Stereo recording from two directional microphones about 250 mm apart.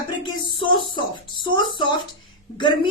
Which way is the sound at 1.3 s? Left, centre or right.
Centre.